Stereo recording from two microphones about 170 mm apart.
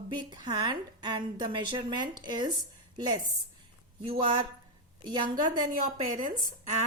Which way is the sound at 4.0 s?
30° right (ahead or behind).